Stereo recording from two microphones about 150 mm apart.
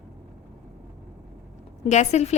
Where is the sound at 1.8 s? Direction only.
50° left (ahead or behind).